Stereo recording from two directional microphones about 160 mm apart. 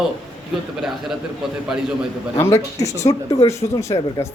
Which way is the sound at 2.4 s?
20° left (ahead or behind).